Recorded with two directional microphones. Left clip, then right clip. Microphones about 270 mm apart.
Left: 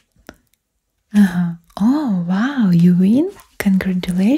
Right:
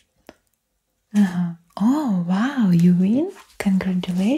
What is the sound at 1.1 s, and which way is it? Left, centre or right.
Speech, left.